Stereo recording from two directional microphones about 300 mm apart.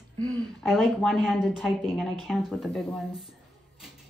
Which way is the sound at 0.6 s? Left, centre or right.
Centre.